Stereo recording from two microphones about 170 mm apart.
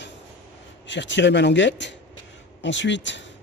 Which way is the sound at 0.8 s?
90° left.